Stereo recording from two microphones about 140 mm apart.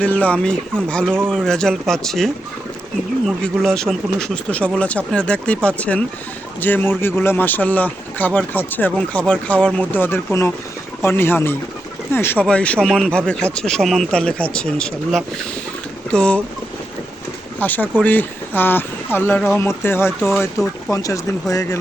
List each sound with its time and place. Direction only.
0.0 s speech: 10° left (ahead or behind)
1.0 s speech: 15° right (ahead or behind)
1.3 s speech: 5° left (ahead or behind)
17.6 s speech: 10° left (ahead or behind)
20.1 s speech: centre (ahead or behind)
20.9 s speech: 25° left (ahead or behind)